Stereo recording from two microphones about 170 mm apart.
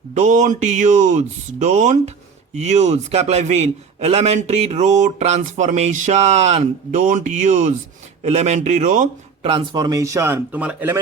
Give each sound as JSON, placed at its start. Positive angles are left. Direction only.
{"t": 0.1, "sound": "a man's voice", "side_deg": -45}
{"t": 9.4, "sound": "speech", "side_deg": -30}